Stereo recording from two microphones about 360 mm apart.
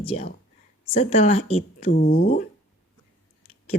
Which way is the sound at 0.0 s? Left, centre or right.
Centre.